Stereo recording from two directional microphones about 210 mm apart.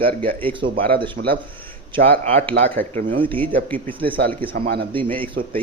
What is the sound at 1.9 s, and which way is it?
Speech, 30° right (ahead or behind).